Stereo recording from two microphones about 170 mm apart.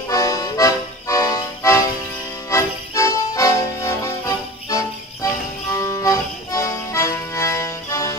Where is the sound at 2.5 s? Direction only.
20° left (ahead or behind).